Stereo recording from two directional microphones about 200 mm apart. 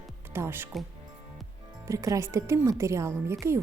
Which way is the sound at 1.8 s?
15° right (ahead or behind).